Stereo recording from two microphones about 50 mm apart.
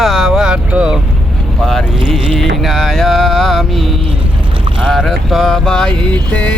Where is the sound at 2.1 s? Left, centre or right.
Centre.